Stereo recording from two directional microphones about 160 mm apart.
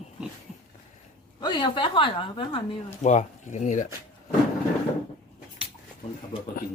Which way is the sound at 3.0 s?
50° left (ahead or behind).